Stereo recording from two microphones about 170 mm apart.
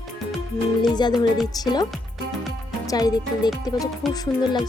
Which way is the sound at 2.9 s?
20° left (ahead or behind).